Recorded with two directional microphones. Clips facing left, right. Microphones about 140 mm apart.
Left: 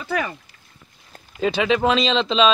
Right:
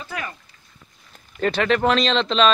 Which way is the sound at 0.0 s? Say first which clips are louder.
Left 7 dB; 90° left.